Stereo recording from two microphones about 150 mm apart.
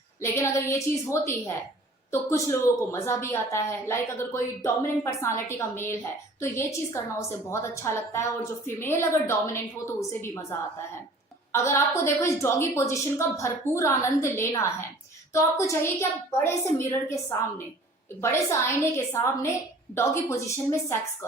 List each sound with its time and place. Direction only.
0.2 s a woman's voice: 15° left (ahead or behind)
11.5 s a woman's voice: 20° left (ahead or behind)